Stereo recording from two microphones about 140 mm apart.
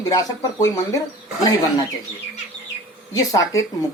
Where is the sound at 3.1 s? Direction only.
25° left (ahead or behind).